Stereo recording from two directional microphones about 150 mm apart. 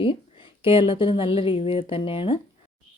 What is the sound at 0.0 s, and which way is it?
Speech, 35° left (ahead or behind).